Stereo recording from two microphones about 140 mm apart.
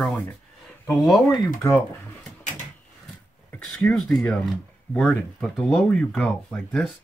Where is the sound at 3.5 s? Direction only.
5° left (ahead or behind).